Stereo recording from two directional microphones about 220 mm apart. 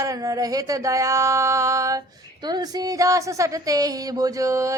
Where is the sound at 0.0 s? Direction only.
15° right (ahead or behind).